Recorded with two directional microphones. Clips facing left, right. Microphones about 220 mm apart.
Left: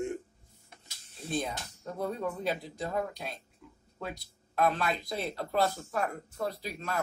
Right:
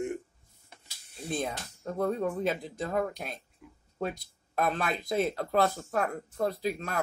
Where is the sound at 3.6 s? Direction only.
10° right (ahead or behind).